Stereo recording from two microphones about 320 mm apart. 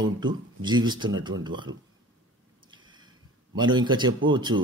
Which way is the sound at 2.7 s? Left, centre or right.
Centre.